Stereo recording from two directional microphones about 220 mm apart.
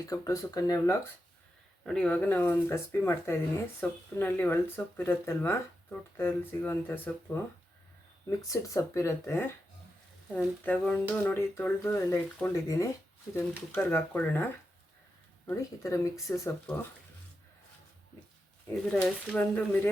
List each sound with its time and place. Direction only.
0.1 s speech: 15° left (ahead or behind)
1.8 s speech: 5° left (ahead or behind)
8.3 s speech: 15° left (ahead or behind)
15.4 s speech: 15° left (ahead or behind)
18.7 s speech: 5° left (ahead or behind)